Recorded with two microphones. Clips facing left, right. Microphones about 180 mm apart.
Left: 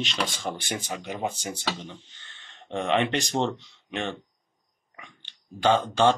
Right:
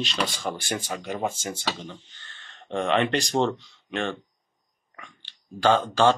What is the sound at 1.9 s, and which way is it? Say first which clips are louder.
Speech: right 2 dB; 20° left (ahead or behind).